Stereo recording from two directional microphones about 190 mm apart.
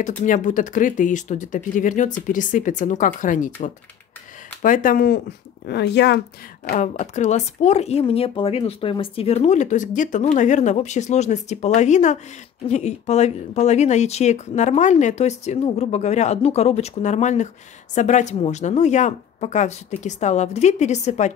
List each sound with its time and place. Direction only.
0.2 s speech: 40° left (ahead or behind)
4.6 s speech: 45° left (ahead or behind)
5.7 s speech: 60° left (ahead or behind)
6.7 s speech: 40° left (ahead or behind)